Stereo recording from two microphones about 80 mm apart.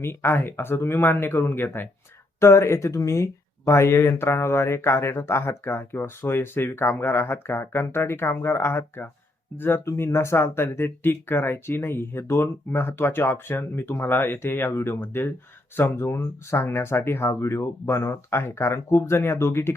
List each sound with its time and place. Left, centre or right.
0.0 s speech: left